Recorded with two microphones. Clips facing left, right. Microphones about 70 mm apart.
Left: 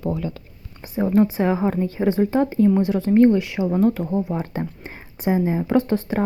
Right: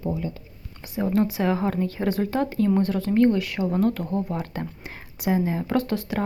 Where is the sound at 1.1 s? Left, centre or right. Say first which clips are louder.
Left 4 dB; left.